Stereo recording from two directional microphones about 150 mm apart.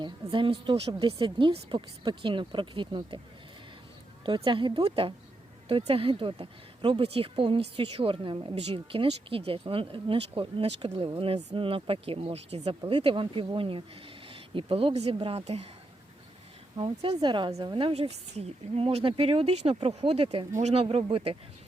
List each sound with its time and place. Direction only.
0.0 s speech: 35° right (ahead or behind)
4.3 s speech: 35° right (ahead or behind)
16.7 s speech: 35° right (ahead or behind)